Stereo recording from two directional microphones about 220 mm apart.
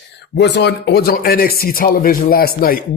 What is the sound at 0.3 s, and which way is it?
Speech, 50° left (ahead or behind).